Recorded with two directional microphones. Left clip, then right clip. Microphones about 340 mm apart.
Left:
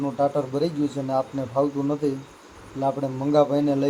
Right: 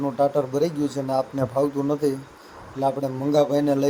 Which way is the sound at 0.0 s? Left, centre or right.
Right.